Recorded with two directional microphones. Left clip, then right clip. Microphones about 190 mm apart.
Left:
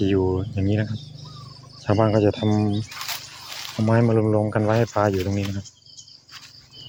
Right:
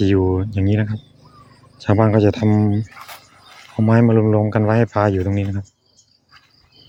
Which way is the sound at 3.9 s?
55° right (ahead or behind).